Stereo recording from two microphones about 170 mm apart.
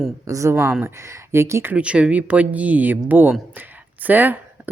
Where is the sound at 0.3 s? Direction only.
20° right (ahead or behind).